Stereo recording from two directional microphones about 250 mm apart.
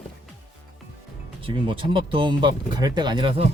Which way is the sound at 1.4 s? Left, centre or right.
Right.